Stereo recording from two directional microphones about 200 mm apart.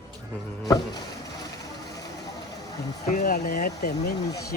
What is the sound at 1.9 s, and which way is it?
Vehicle, 15° left (ahead or behind).